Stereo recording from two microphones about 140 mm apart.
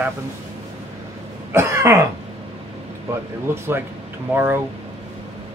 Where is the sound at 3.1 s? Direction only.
20° right (ahead or behind).